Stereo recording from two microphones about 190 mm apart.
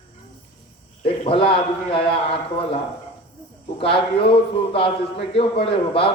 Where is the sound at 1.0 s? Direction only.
30° left (ahead or behind).